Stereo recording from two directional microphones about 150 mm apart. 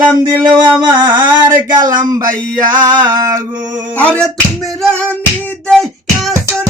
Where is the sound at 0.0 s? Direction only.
30° right (ahead or behind).